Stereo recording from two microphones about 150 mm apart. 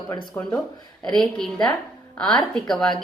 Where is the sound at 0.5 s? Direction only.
30° left (ahead or behind).